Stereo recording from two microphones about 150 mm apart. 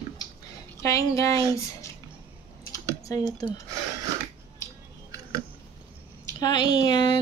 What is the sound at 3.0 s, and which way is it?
Typing, 25° left (ahead or behind).